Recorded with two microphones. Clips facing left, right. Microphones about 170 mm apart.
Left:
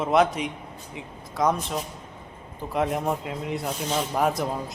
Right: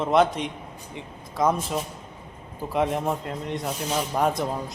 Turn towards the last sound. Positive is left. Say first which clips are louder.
# even
turn(degrees=0)  # may be behind; listen again after turning